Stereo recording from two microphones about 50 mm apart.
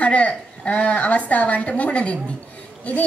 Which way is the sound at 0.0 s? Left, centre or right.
Left.